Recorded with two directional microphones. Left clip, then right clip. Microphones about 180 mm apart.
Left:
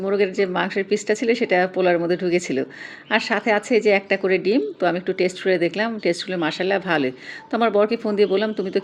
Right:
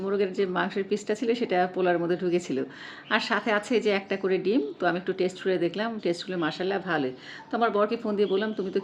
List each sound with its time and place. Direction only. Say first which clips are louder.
0.0 s a woman's voice: left 6 dB; 25° left (ahead or behind)